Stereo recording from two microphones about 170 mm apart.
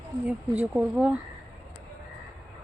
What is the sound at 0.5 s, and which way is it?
Speech, 5° right (ahead or behind).